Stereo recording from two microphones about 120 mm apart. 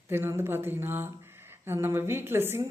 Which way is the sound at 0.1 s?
20° right (ahead or behind).